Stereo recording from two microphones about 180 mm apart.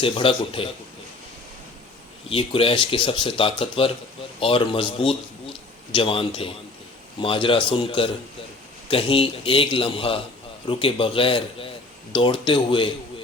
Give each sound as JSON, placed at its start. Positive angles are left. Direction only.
{"t": 0.0, "sound": "a man's voice", "side_deg": 30}
{"t": 2.3, "sound": "a man's voice", "side_deg": 30}